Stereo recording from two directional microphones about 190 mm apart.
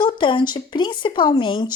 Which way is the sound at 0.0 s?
25° left (ahead or behind).